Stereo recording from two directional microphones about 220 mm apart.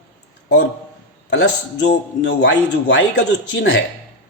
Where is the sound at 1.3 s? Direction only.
55° left (ahead or behind).